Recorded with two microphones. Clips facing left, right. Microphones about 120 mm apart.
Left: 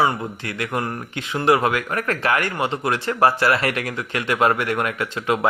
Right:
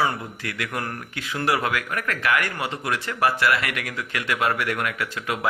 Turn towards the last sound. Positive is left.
turn(degrees=30)  # may be behind; listen again after turning